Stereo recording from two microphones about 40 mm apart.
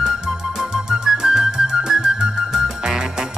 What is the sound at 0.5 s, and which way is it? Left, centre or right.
Music, centre.